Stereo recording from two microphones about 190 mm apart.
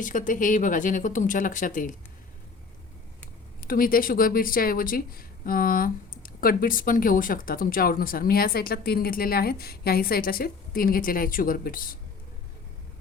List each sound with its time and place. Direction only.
0.0 s speech: 45° left (ahead or behind)
3.6 s speech: 50° left (ahead or behind)